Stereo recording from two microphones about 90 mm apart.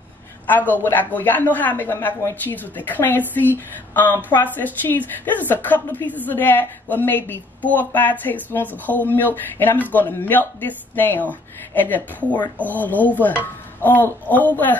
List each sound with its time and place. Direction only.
0.5 s a woman's voice: 20° left (ahead or behind)